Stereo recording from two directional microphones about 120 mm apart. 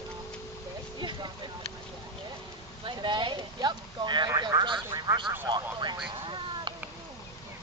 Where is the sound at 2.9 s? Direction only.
40° right (ahead or behind).